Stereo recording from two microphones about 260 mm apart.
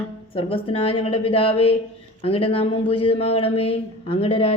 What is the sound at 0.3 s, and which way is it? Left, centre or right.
A man's voice, left.